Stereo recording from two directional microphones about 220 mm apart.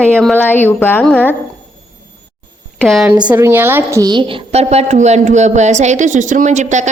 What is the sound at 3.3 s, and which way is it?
A woman's voice, 10° right (ahead or behind).